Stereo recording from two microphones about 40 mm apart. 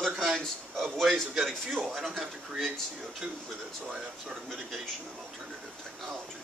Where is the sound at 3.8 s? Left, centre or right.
Centre.